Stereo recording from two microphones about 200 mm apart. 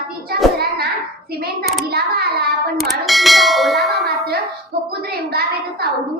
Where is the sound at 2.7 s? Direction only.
Centre (ahead or behind).